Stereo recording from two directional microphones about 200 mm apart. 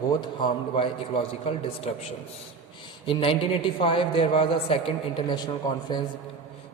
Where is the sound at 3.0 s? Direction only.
25° left (ahead or behind).